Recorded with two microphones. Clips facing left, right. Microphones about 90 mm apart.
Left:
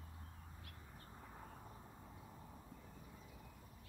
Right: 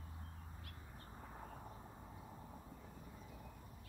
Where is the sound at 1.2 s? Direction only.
20° right (ahead or behind).